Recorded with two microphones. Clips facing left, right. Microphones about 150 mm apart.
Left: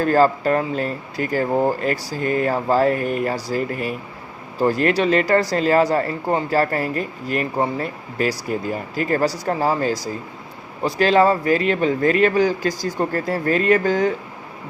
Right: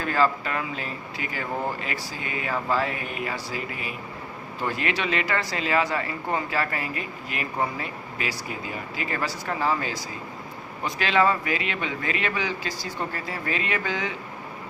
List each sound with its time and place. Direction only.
0.0 s speech: 40° left (ahead or behind)